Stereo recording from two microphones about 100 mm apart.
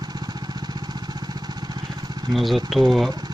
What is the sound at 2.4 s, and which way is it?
Speech, centre (ahead or behind).